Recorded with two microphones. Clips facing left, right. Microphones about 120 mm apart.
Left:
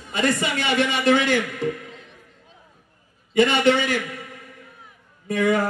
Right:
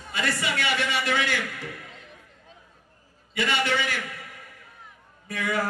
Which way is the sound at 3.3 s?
25° left (ahead or behind).